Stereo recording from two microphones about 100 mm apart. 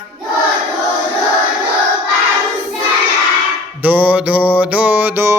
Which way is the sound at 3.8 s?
15° right (ahead or behind).